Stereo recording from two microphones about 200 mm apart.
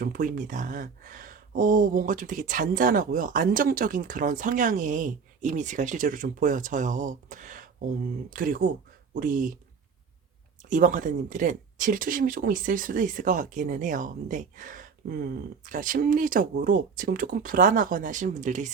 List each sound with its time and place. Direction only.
0.0 s speech: 45° right (ahead or behind)
10.7 s speech: 40° right (ahead or behind)